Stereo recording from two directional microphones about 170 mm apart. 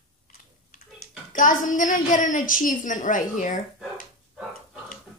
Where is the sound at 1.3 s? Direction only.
50° left (ahead or behind).